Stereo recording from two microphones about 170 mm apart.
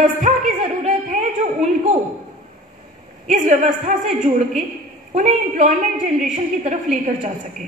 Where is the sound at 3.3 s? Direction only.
45° right (ahead or behind).